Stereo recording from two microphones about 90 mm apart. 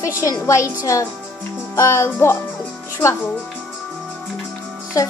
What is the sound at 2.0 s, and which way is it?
Music, 25° left (ahead or behind).